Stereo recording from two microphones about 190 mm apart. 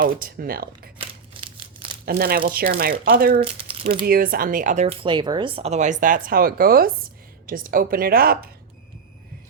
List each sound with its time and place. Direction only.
0.0 s speech: 45° right (ahead or behind)
0.9 s a sound: 25° right (ahead or behind)
2.0 s speech: 50° right (ahead or behind)
3.4 s speech: 30° right (ahead or behind)
4.0 s speech: 50° right (ahead or behind)